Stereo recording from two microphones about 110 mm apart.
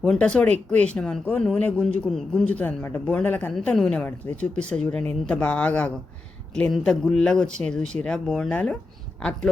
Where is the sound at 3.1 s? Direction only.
10° left (ahead or behind).